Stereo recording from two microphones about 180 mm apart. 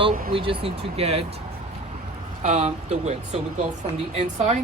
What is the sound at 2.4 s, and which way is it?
Speech, 40° right (ahead or behind).